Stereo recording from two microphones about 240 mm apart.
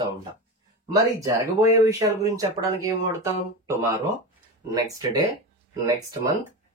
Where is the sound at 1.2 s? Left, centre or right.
Centre.